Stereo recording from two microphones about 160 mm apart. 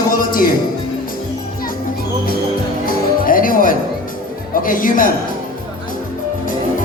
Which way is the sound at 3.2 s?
60° left (ahead or behind).